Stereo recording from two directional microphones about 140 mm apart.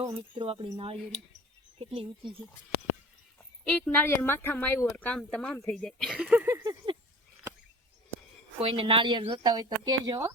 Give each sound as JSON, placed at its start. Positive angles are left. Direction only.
{"t": 0.0, "sound": "speech", "side_deg": -35}
{"t": 3.6, "sound": "speech", "side_deg": 10}
{"t": 6.1, "sound": "a sound", "side_deg": -10}
{"t": 8.5, "sound": "speech", "side_deg": -40}